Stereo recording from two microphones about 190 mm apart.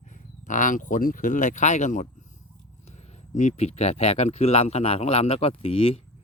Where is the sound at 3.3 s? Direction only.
40° left (ahead or behind).